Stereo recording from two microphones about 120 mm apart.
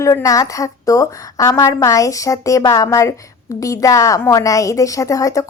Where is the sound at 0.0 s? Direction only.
25° left (ahead or behind).